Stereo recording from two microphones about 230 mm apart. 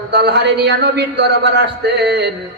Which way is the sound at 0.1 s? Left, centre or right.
Right.